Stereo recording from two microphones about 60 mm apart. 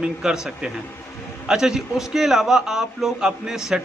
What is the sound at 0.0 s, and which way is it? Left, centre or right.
A man's voice, centre.